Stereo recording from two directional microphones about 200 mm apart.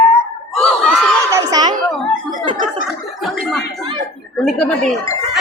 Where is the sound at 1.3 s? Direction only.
20° right (ahead or behind).